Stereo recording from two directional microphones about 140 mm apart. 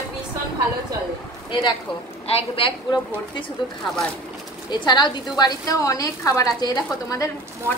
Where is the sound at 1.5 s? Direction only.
35° left (ahead or behind).